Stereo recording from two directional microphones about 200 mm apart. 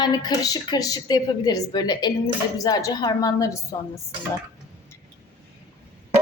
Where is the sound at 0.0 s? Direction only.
20° left (ahead or behind).